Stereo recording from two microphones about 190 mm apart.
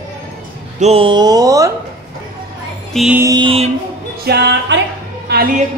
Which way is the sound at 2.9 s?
Centre (ahead or behind).